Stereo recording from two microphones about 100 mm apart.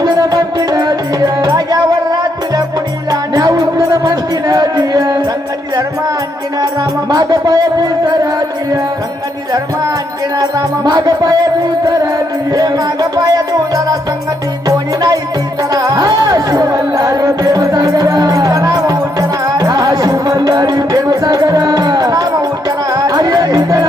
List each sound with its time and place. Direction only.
0.0 s music: 40° right (ahead or behind)
7.1 s music: 40° right (ahead or behind)
10.3 s music: 40° right (ahead or behind)
12.5 s music: 35° right (ahead or behind)